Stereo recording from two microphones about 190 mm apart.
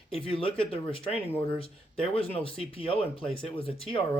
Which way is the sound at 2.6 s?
30° left (ahead or behind).